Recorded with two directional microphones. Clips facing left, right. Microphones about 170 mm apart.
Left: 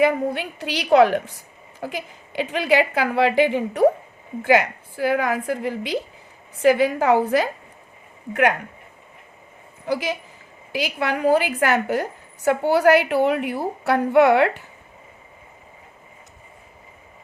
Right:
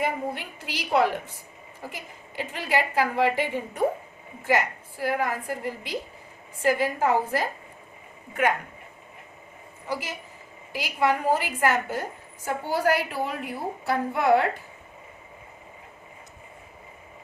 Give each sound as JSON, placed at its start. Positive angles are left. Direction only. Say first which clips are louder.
{"t": 0.0, "sound": "a woman's voice", "louder": "left 9 dB", "side_deg": 80}
{"t": 8.3, "sound": "a woman's voice", "louder": "left 5 dB", "side_deg": 70}
{"t": 9.8, "sound": "a woman's voice", "louder": "left 8 dB", "side_deg": 90}